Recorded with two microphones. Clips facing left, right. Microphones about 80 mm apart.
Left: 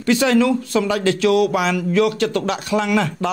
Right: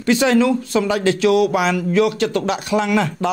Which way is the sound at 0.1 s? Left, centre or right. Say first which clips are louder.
Right 1 dB; right.